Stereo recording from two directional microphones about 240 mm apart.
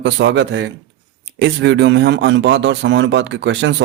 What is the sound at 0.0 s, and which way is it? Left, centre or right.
Speech, right.